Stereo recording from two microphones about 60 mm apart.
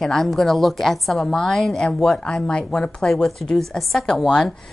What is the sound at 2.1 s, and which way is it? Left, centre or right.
A woman's voice, centre.